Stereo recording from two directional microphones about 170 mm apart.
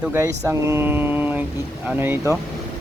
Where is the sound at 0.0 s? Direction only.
15° right (ahead or behind).